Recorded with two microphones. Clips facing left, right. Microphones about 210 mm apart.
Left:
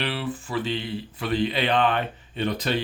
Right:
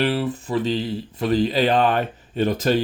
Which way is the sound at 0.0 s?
40° right (ahead or behind).